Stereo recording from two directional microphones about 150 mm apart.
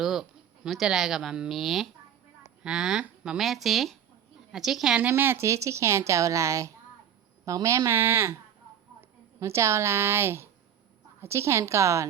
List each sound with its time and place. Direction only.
0.0 s a woman's voice: centre (ahead or behind); by 12.0 s 20° right (ahead or behind)